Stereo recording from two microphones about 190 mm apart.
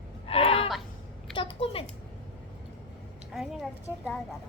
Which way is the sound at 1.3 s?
30° left (ahead or behind).